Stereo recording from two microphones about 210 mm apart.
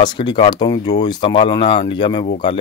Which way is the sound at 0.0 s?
20° left (ahead or behind).